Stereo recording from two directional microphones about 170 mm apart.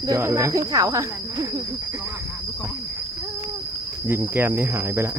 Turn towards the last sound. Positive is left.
turn(degrees=-15)  # may be behind; listen again after turning